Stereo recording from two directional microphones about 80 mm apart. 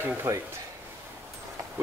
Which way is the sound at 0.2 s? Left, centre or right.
Right.